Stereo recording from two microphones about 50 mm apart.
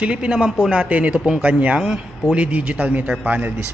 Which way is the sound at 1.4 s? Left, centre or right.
Right.